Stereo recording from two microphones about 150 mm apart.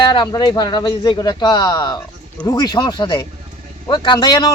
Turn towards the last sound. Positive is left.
turn(degrees=30)  # may be behind; listen again after turning